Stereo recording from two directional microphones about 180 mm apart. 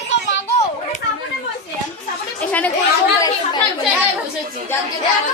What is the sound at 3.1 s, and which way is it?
Chatter, 20° left (ahead or behind).